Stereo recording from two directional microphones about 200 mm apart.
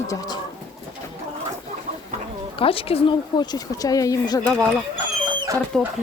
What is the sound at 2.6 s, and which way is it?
Speech, 25° left (ahead or behind).